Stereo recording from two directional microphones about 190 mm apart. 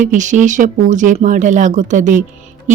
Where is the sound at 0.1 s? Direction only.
40° right (ahead or behind).